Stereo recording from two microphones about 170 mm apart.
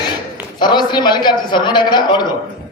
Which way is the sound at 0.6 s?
25° left (ahead or behind).